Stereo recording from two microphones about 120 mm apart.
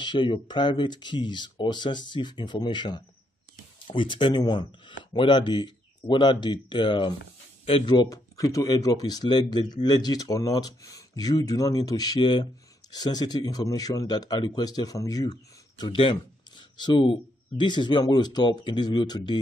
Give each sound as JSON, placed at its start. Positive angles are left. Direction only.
{"t": 0.0, "sound": "speech", "side_deg": 40}
{"t": 15.8, "sound": "speech", "side_deg": 45}